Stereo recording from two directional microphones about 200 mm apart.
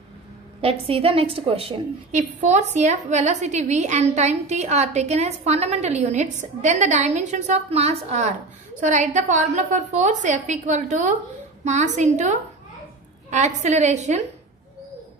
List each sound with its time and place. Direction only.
0.6 s a woman's voice: 30° right (ahead or behind)
13.6 s a woman's voice: 35° right (ahead or behind)